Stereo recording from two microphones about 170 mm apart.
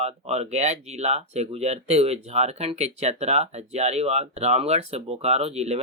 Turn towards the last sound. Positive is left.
turn(degrees=-40)  # may be behind; listen again after turning